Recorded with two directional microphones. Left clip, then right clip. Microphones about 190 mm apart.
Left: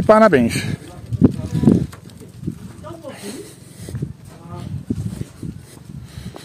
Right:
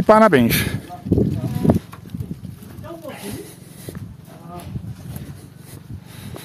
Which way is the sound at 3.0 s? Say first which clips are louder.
Even; centre (ahead or behind).